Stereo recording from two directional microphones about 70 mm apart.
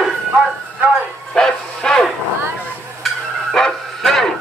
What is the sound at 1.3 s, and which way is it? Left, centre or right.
Bow-wow, centre.